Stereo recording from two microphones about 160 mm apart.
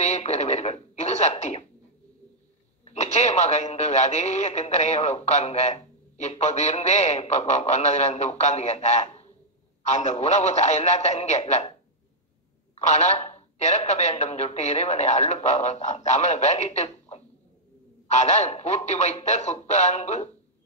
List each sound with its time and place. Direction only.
0.0 s speech: 45° left (ahead or behind)
2.8 s speech: 45° left (ahead or behind)
12.7 s speech: 45° left (ahead or behind)